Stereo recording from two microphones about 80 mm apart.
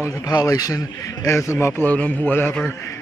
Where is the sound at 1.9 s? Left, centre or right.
Centre.